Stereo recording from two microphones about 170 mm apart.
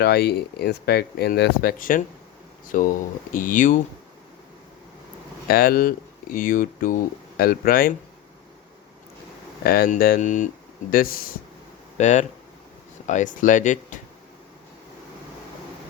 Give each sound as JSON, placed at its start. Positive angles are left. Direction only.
{"t": 0.0, "sound": "speech", "side_deg": 70}
{"t": 5.5, "sound": "speech", "side_deg": 60}
{"t": 9.6, "sound": "speech", "side_deg": 60}
{"t": 10.9, "sound": "speech", "side_deg": 60}
{"t": 11.9, "sound": "speech", "side_deg": 45}